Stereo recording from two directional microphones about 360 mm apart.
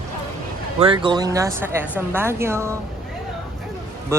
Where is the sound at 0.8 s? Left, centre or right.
Centre.